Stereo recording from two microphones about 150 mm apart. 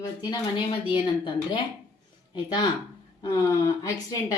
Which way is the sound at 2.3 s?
30° left (ahead or behind).